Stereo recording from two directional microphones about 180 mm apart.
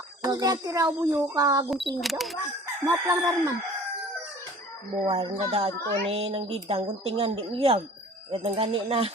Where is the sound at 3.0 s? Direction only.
20° right (ahead or behind).